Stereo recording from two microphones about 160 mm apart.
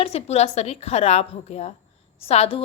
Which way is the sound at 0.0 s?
40° left (ahead or behind).